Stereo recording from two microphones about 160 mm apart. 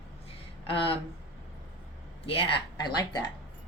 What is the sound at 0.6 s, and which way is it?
Speech, 35° left (ahead or behind).